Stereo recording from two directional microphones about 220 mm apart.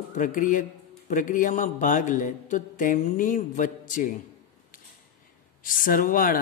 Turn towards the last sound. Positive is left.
turn(degrees=40)  # may be behind; listen again after turning